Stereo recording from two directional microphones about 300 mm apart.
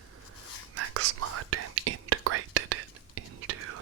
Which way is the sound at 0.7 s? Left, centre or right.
Right.